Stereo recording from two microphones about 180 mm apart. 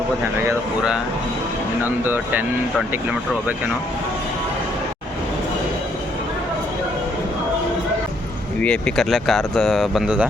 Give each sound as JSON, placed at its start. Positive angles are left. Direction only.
{"t": 1.8, "sound": "speech", "side_deg": -10}
{"t": 8.6, "sound": "speech", "side_deg": 5}